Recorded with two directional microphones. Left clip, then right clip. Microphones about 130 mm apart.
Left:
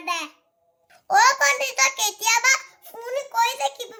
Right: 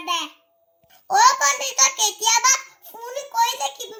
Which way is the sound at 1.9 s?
10° left (ahead or behind).